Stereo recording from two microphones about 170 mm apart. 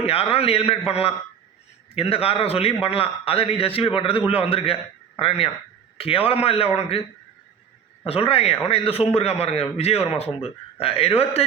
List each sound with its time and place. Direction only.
0.0 s a man's voice: 35° left (ahead or behind)
8.0 s a man's voice: 35° left (ahead or behind)